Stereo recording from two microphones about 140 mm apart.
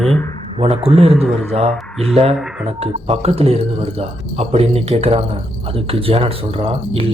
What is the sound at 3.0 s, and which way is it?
Speech, 45° right (ahead or behind).